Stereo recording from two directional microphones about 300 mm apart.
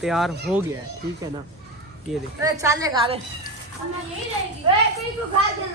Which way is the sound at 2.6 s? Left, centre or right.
Centre.